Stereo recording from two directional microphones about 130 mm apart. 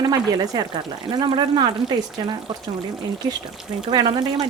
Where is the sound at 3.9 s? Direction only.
35° right (ahead or behind).